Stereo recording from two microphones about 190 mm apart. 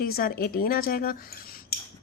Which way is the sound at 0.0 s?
50° left (ahead or behind).